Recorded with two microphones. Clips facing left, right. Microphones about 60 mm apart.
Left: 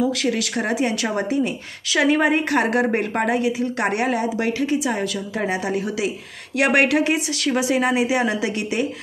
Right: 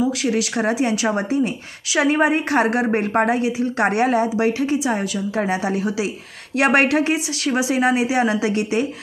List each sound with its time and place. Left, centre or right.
0.2 s a woman's voice: right
2.0 s a woman's voice: right